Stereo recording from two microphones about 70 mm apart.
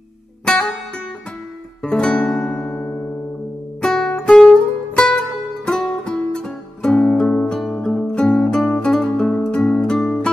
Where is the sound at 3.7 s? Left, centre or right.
Centre.